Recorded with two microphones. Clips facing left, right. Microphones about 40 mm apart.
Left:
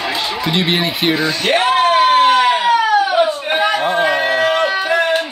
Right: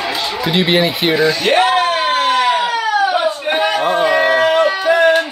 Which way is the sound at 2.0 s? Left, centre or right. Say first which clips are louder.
Left 3 dB; left.